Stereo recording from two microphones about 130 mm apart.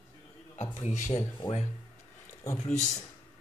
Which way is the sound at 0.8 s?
65° left (ahead or behind).